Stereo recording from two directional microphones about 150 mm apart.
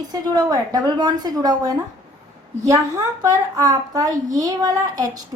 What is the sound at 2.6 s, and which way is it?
A woman's voice, 20° right (ahead or behind).